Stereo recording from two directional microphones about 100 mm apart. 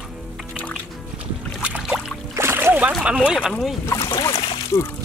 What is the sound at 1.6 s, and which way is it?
Boat, 10° right (ahead or behind).